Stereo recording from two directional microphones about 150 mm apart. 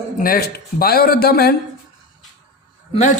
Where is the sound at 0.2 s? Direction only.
80° left.